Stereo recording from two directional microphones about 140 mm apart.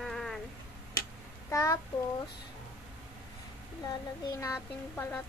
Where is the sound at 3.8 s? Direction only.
25° left (ahead or behind).